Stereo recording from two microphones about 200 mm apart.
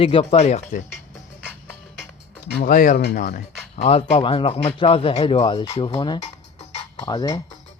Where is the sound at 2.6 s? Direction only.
40° left (ahead or behind).